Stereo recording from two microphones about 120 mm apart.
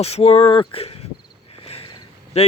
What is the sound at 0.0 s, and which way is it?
Speech, 60° left (ahead or behind).